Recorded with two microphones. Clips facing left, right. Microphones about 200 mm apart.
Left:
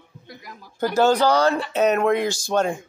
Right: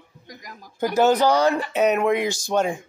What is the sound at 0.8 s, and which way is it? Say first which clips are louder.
Speech: even; 20° right (ahead or behind).